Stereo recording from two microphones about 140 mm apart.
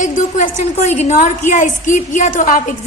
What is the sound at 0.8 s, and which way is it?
A woman's voice, 55° left (ahead or behind).